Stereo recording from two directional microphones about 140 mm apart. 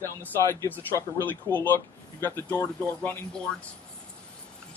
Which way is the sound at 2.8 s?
5° left (ahead or behind).